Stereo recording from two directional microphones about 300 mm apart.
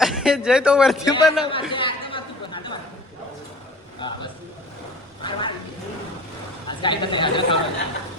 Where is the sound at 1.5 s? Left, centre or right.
Centre.